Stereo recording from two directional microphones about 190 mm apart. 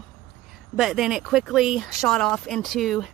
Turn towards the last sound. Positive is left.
turn(degrees=0)  # may be behind; listen again after turning